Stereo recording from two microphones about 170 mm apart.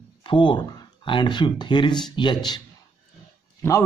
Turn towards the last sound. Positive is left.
turn(degrees=15)  # may be behind; listen again after turning